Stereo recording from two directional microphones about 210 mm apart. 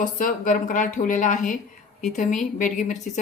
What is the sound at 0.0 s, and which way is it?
A woman's voice, 40° left (ahead or behind).